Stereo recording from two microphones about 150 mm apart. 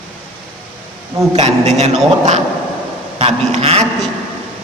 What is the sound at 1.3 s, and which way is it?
A man's voice, 45° right (ahead or behind).